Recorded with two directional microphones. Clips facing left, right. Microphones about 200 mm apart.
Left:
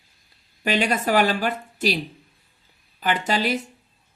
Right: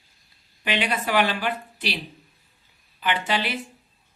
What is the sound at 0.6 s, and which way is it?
A woman's voice, 45° left (ahead or behind).